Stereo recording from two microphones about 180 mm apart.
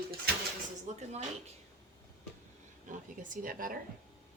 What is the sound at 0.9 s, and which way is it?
Speech, 40° right (ahead or behind).